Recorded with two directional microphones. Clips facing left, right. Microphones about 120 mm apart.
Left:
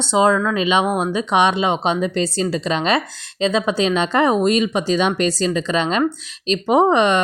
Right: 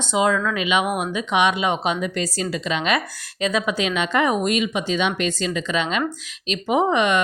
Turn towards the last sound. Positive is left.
turn(degrees=35)  # may be behind; listen again after turning